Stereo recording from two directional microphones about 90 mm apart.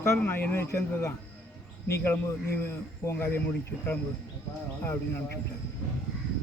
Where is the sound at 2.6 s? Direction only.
25° left (ahead or behind).